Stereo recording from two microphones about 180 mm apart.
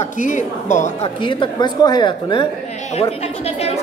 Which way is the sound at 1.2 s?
25° left (ahead or behind).